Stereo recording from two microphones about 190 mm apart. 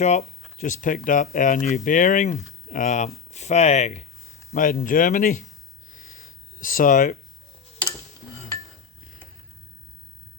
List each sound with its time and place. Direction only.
0.0 s speech: 35° left (ahead or behind)
4.5 s speech: 50° left (ahead or behind)
5.9 s a sound: 45° left (ahead or behind)